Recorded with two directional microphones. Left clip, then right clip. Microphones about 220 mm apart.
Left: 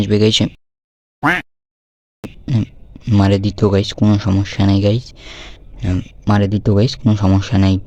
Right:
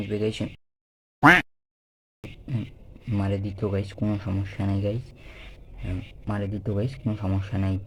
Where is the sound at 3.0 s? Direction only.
40° left (ahead or behind).